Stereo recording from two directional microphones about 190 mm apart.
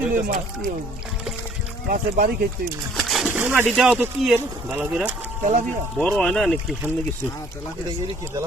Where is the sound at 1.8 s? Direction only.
50° right (ahead or behind).